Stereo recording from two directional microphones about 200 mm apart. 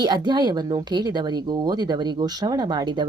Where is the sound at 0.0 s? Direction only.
20° right (ahead or behind).